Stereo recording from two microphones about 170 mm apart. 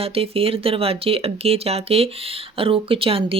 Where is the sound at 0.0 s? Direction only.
35° right (ahead or behind).